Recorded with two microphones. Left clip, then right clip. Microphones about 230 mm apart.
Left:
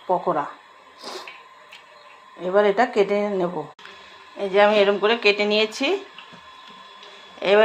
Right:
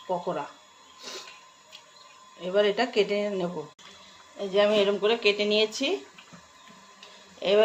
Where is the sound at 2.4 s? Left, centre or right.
Centre.